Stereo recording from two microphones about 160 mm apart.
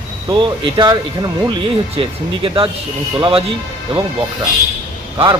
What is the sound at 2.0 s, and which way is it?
Speech, 35° right (ahead or behind).